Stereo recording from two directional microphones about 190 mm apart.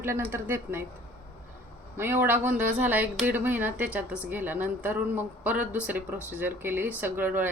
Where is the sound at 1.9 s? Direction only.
10° right (ahead or behind).